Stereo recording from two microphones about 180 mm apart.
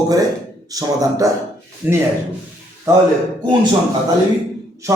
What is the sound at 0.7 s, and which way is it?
Speech, 20° right (ahead or behind).